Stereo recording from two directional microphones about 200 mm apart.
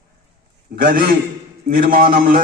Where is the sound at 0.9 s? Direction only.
45° right (ahead or behind).